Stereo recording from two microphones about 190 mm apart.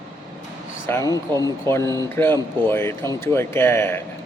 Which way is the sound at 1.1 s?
20° right (ahead or behind).